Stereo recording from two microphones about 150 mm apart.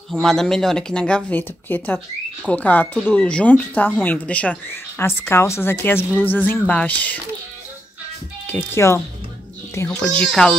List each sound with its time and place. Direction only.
0.1 s speech: centre (ahead or behind)
8.5 s speech: 15° left (ahead or behind)
9.8 s speech: 5° left (ahead or behind)